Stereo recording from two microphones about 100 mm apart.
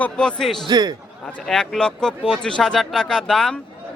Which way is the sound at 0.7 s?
45° right (ahead or behind).